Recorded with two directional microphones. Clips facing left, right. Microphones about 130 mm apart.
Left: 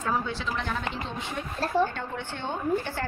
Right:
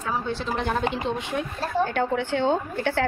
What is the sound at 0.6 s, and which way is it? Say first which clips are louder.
A woman's voice: right 7 dB; 60° right (ahead or behind).